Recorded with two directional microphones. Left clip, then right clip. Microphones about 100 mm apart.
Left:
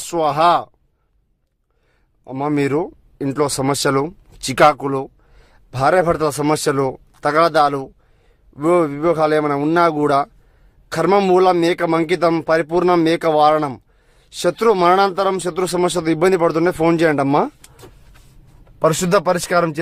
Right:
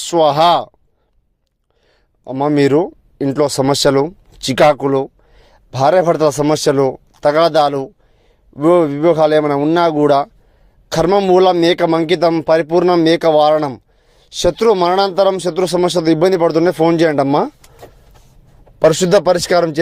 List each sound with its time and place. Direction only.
0.0 s speech: 35° right (ahead or behind)
2.3 s speech: 15° right (ahead or behind)
2.6 s speech: 25° right (ahead or behind)
5.3 s a sound: 20° right (ahead or behind)
6.5 s speech: 15° right (ahead or behind)
11.1 s speech: 5° right (ahead or behind)
11.6 s speech: 20° right (ahead or behind)
12.8 s speech: centre (ahead or behind)
13.1 s speech: 15° right (ahead or behind)
15.3 s speech: 5° right (ahead or behind)
18.8 s speech: 20° right (ahead or behind)